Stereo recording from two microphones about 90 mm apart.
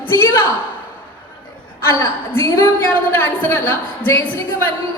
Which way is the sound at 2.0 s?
30° left (ahead or behind).